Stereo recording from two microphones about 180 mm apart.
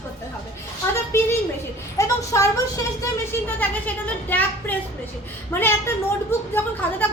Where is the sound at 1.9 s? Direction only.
15° left (ahead or behind).